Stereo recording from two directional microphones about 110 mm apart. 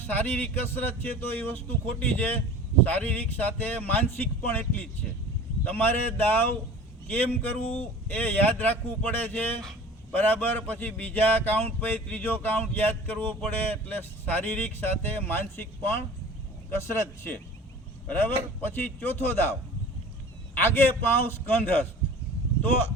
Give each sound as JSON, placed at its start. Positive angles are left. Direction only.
{"t": 0.0, "sound": "a man's voice", "side_deg": 15}
{"t": 20.6, "sound": "a man's voice", "side_deg": 20}